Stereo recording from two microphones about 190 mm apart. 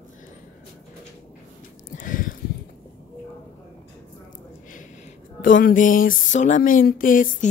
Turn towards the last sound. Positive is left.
turn(degrees=45)  # may be behind; listen again after turning